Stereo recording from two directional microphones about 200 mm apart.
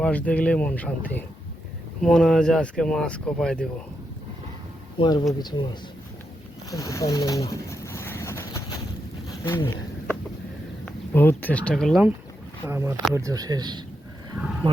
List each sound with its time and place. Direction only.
0.0 s speech: 5° left (ahead or behind)
4.9 s speech: 20° left (ahead or behind)
6.7 s a sound: 15° left (ahead or behind)
10.8 s speech: 10° left (ahead or behind)
12.6 s speech: 15° right (ahead or behind)